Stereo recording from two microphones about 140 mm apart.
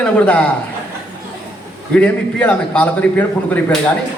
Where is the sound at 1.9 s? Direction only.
10° left (ahead or behind).